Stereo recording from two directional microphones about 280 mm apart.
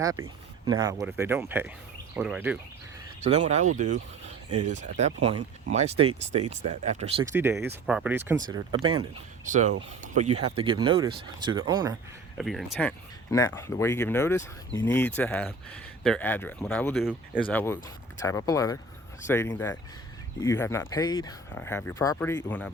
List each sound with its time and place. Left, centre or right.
0.0 s speech: centre
3.2 s speech: right
7.3 s speech: centre
12.4 s speech: centre
13.3 s speech: centre